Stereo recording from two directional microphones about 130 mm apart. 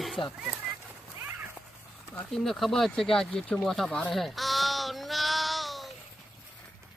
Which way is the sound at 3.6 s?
5° left (ahead or behind).